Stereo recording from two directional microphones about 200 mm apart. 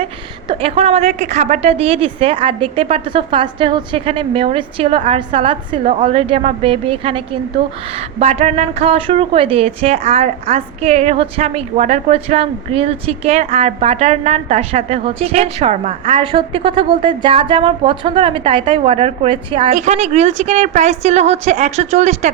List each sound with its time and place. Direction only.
0.4 s a woman's voice: 30° right (ahead or behind)
8.2 s a woman's voice: 35° right (ahead or behind)